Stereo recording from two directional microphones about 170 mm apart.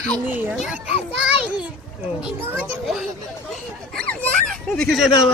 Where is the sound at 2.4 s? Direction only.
10° right (ahead or behind).